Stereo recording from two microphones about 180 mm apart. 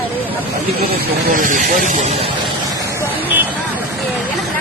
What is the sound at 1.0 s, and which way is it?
Speech, 50° right (ahead or behind).